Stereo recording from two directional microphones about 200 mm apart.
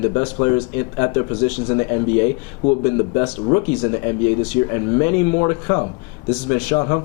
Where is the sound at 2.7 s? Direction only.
25° left (ahead or behind).